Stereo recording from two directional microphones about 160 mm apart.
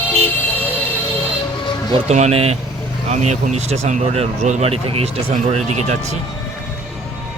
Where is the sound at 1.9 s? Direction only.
45° right (ahead or behind).